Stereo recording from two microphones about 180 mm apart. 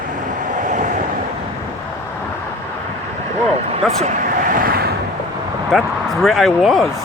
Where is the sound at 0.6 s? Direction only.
45° right (ahead or behind).